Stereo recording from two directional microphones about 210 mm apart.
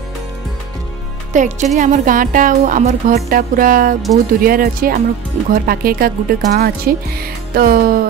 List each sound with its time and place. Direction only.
1.3 s speech: 35° right (ahead or behind)